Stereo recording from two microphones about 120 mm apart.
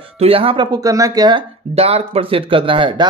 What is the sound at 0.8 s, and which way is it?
Speech, 30° right (ahead or behind).